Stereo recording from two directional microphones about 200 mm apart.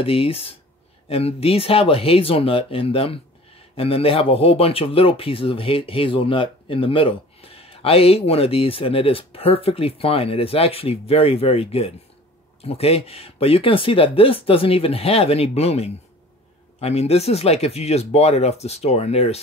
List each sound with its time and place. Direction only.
0.0 s speech: 30° left (ahead or behind)